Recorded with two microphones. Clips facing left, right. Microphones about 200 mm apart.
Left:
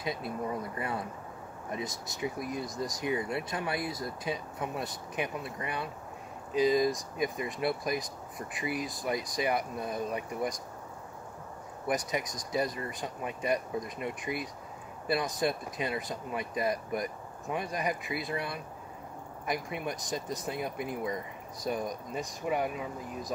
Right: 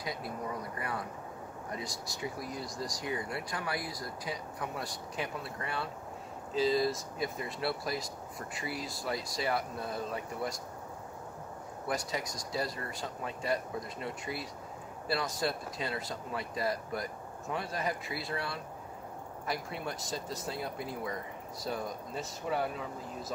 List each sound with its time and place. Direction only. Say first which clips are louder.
0.0 s speech: left 4 dB; 25° left (ahead or behind)
11.9 s speech: left 4 dB; 20° left (ahead or behind)